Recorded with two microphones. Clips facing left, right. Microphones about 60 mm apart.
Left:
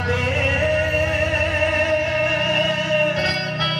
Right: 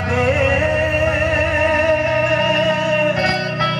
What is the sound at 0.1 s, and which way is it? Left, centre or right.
Music, right.